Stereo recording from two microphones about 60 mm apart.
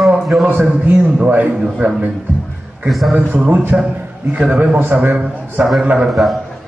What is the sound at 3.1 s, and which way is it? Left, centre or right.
A man's voice, right.